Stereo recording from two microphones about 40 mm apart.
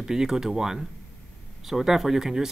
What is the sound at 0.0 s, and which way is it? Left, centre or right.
Speech, centre.